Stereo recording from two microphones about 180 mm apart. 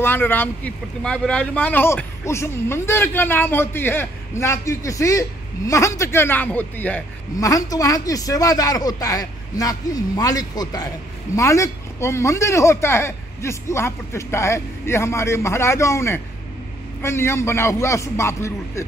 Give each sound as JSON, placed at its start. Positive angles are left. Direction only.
{"t": 0.0, "sound": "a man's voice", "side_deg": 10}